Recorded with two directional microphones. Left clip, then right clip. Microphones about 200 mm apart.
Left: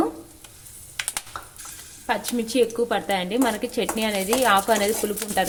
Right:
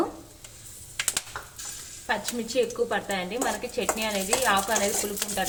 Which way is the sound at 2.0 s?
55° left (ahead or behind).